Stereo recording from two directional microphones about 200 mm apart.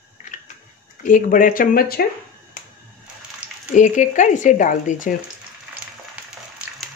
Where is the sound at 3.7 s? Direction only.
40° left (ahead or behind).